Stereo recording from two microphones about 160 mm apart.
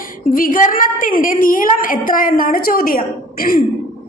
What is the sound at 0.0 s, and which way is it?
A woman's voice, 60° left (ahead or behind).